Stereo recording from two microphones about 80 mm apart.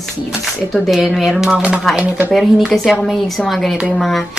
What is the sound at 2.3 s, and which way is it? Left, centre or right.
A woman's voice, centre.